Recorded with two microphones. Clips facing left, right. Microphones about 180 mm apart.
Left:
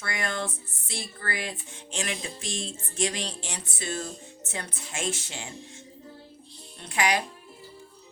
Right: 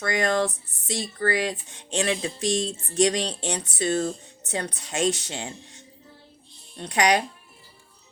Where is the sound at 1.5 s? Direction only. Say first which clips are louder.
Right 7 dB; 35° right (ahead or behind).